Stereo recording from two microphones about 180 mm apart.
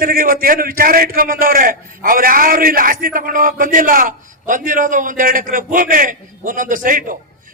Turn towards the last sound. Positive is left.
turn(degrees=-50)  # may be behind; listen again after turning